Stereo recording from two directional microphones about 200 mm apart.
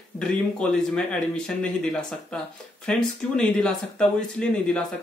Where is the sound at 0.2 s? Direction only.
5° left (ahead or behind).